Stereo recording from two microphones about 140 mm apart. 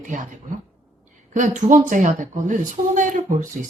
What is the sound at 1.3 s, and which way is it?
A woman's voice, 65° right (ahead or behind).